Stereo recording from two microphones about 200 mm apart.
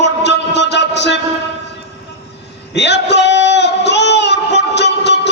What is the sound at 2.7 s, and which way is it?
Music, 60° left (ahead or behind).